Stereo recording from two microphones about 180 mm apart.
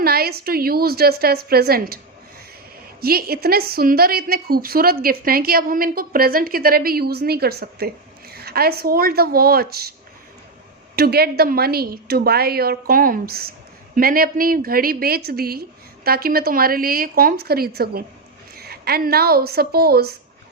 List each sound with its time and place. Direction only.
0.0 s a woman's voice: 60° right (ahead or behind)
3.0 s a woman's voice: 55° right (ahead or behind)
10.9 s a woman's voice: 60° right (ahead or behind)